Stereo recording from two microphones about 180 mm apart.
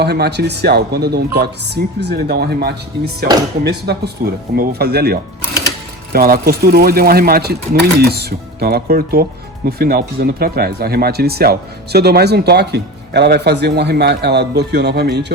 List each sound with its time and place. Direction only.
0.0 s speech: 65° right (ahead or behind)